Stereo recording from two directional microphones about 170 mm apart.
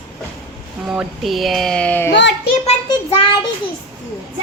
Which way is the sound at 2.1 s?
90° left.